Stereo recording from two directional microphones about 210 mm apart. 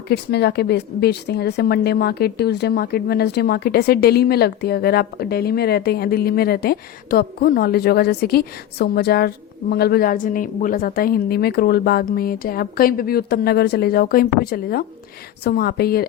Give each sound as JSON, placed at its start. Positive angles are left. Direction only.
{"t": 0.1, "sound": "a woman's voice", "side_deg": 50}